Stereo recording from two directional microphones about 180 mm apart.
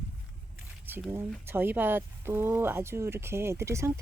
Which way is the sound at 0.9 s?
10° right (ahead or behind).